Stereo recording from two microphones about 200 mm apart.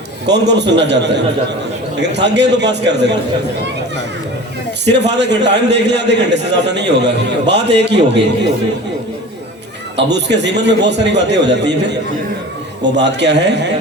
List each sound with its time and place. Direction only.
0.3 s a man's voice: 60° right (ahead or behind)
4.9 s a man's voice: 60° right (ahead or behind)
10.1 s a man's voice: 60° right (ahead or behind)